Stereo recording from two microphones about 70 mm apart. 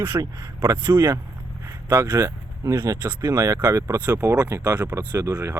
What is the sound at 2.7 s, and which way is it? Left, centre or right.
Speech, right.